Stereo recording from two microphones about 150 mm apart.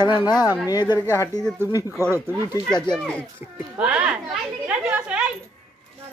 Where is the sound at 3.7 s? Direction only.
10° right (ahead or behind).